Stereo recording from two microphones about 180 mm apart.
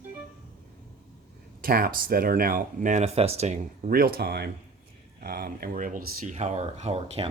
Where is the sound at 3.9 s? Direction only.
55° right (ahead or behind).